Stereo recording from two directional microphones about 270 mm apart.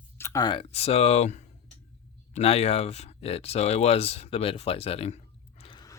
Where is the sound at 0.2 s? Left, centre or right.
Centre.